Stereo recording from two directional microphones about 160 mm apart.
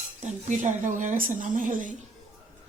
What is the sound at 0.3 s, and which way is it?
A woman's voice, 50° right (ahead or behind).